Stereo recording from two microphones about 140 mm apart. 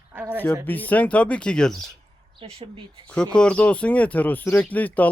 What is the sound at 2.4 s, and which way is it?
Speech, 40° right (ahead or behind).